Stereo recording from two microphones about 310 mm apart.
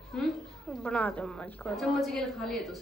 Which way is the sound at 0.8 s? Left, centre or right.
Centre.